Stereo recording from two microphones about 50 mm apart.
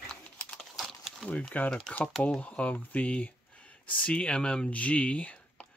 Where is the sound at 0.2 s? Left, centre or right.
Left.